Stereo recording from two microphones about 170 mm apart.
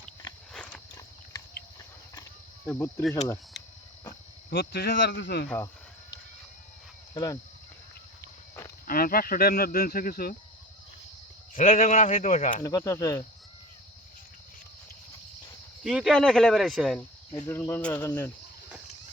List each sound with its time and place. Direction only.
0.5 s horse: 5° left (ahead or behind)
2.6 s speech: 10° left (ahead or behind)
3.6 s a sound: centre (ahead or behind)
4.4 s speech: 75° left (ahead or behind)
7.1 s speech: 25° left (ahead or behind)
8.9 s speech: 60° left (ahead or behind)
11.5 s speech: 50° left (ahead or behind)
12.6 s speech: 20° left (ahead or behind)
15.8 s speech: centre (ahead or behind)
17.4 s speech: 15° left (ahead or behind)